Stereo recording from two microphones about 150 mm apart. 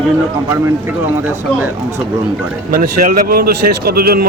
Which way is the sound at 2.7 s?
75° right (ahead or behind).